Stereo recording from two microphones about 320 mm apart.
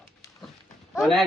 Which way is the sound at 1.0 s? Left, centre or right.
Centre.